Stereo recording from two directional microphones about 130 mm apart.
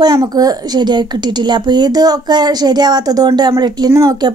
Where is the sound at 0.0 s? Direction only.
30° right (ahead or behind).